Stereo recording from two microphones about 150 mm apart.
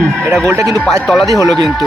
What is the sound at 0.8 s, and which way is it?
Speech, 5° left (ahead or behind).